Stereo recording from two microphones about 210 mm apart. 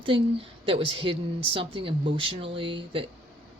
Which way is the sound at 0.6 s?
25° right (ahead or behind).